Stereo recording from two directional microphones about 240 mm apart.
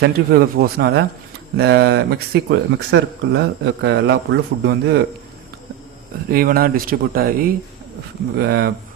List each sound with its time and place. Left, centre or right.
0.0 s speech: right
6.3 s speech: right